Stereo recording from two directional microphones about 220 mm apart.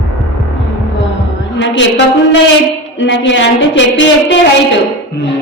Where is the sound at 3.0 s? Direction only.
55° left (ahead or behind).